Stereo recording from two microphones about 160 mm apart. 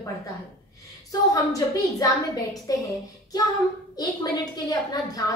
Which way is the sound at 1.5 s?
20° left (ahead or behind).